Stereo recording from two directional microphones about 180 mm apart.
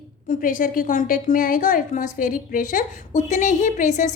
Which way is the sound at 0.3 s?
50° left (ahead or behind).